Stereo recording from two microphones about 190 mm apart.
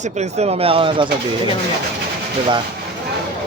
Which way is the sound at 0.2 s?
35° right (ahead or behind).